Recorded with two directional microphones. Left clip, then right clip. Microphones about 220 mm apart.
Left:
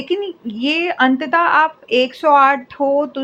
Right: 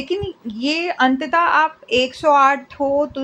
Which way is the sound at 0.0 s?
20° left (ahead or behind).